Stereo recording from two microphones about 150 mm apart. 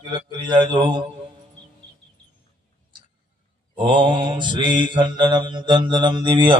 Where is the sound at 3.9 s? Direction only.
30° right (ahead or behind).